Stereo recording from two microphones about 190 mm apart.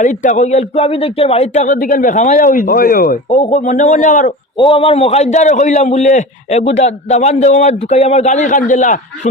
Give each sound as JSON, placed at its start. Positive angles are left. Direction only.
{"t": 0.0, "sound": "a man's voice", "side_deg": 40}
{"t": 3.2, "sound": "a man's voice", "side_deg": 35}
{"t": 4.5, "sound": "a man's voice", "side_deg": 25}